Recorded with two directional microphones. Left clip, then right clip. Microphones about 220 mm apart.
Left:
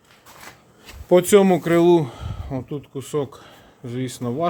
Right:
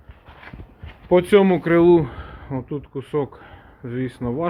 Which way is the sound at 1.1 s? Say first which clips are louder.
Left 1 dB; 10° left (ahead or behind).